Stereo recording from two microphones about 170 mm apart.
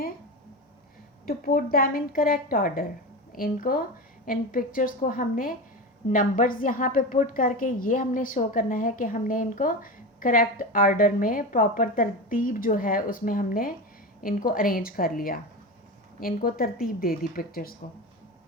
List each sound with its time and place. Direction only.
1.2 s a woman's voice: 60° left (ahead or behind)